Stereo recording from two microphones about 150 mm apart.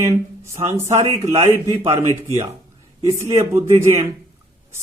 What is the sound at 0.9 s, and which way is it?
A man's voice, 45° right (ahead or behind).